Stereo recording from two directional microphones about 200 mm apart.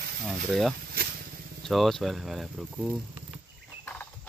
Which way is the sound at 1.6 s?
Centre (ahead or behind).